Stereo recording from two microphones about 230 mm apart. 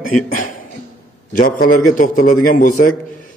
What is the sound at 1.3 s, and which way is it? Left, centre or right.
A man's voice, left.